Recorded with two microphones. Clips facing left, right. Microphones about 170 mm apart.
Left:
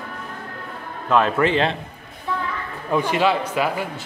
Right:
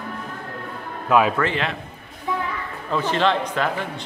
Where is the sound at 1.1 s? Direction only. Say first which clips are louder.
Right 1 dB; 5° right (ahead or behind).